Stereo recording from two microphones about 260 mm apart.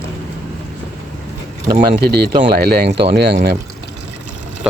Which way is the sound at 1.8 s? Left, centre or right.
Right.